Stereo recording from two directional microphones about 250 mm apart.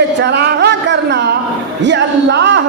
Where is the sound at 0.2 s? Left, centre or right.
Right.